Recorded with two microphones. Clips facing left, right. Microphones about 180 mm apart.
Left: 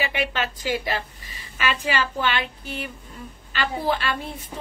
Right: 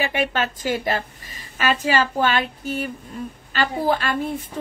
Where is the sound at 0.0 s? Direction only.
45° right (ahead or behind).